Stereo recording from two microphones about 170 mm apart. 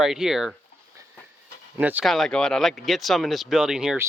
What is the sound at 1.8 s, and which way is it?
Speech, 10° right (ahead or behind).